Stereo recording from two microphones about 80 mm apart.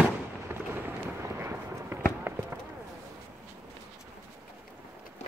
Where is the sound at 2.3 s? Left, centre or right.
Right.